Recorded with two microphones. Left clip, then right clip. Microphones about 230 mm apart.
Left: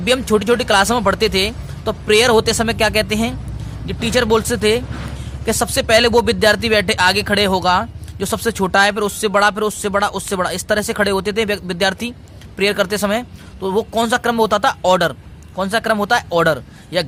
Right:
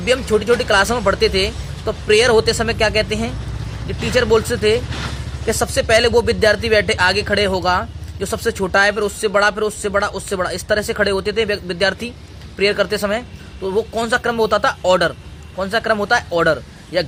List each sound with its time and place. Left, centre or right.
0.0 s speech: left